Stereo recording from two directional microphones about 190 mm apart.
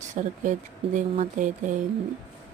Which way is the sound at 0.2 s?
35° right (ahead or behind).